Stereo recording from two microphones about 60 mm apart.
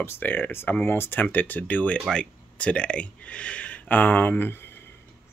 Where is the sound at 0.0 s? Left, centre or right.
Left.